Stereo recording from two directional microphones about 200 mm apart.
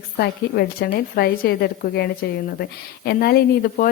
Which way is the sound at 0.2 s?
50° left (ahead or behind).